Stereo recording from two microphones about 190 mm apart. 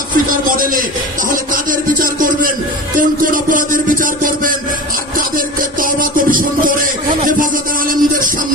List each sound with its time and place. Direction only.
0.3 s speech: 45° right (ahead or behind)
5.3 s music: 45° right (ahead or behind)